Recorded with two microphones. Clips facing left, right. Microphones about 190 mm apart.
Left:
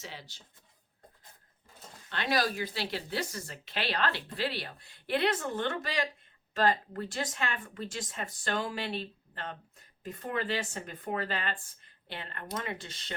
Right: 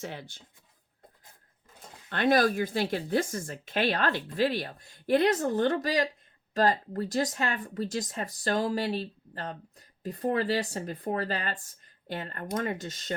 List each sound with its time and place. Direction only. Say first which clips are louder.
0.0 s speech: right 7 dB; 55° right (ahead or behind)
2.0 s speech: right 7 dB; 50° right (ahead or behind)